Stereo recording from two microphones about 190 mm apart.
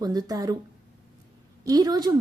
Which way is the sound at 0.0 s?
20° right (ahead or behind).